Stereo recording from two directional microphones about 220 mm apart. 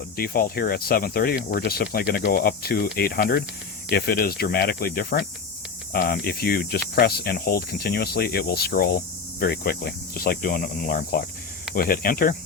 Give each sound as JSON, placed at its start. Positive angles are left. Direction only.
{"t": 0.2, "sound": "speech", "side_deg": 45}